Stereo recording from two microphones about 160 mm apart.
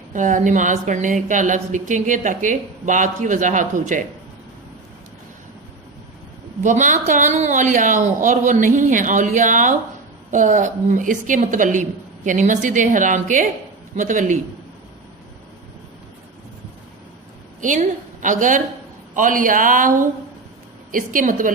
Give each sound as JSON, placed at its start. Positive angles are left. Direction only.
{"t": 0.1, "sound": "a woman's voice", "side_deg": -55}
{"t": 6.6, "sound": "a woman's voice", "side_deg": -50}
{"t": 17.6, "sound": "a woman's voice", "side_deg": -50}